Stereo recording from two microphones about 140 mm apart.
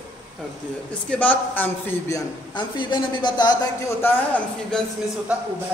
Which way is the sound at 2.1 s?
35° left (ahead or behind).